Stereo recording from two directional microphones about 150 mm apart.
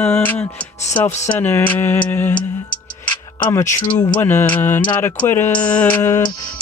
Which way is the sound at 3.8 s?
30° left (ahead or behind).